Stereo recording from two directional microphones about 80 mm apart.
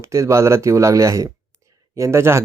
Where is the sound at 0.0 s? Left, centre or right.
Right.